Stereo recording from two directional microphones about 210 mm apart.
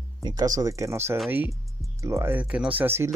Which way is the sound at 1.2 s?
5° right (ahead or behind).